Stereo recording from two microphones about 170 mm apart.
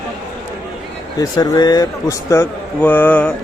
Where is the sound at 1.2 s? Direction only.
20° left (ahead or behind).